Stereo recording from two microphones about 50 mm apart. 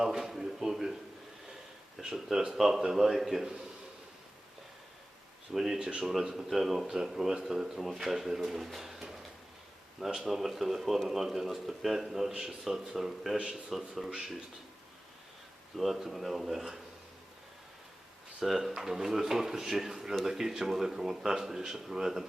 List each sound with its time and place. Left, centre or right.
0.0 s speech: centre
2.0 s speech: centre
5.5 s speech: centre
5.8 s speech: right
6.3 s speech: centre
16.0 s speech: centre
18.4 s speech: centre